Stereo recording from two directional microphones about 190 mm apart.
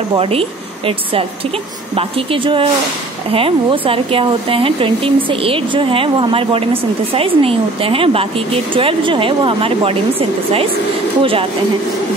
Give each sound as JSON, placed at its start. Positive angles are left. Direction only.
{"t": 0.1, "sound": "speech", "side_deg": -30}